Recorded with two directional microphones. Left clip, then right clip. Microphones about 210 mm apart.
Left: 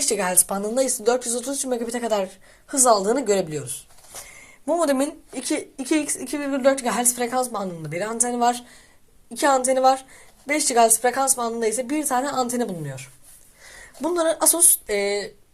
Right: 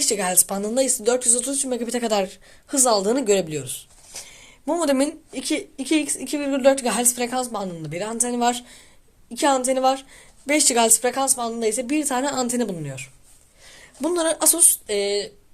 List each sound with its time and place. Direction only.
0.0 s a woman's voice: 15° right (ahead or behind)
10.4 s a woman's voice: 35° right (ahead or behind)
11.1 s a woman's voice: 15° right (ahead or behind)
14.0 s a woman's voice: 30° right (ahead or behind)
14.4 s speech: 20° right (ahead or behind)